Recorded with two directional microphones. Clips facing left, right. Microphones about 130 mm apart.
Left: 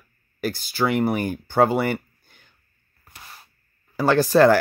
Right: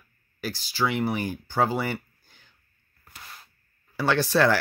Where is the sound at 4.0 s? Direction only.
45° left (ahead or behind).